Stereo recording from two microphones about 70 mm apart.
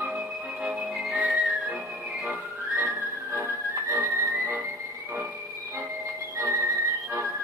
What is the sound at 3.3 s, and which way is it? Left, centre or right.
Music, right.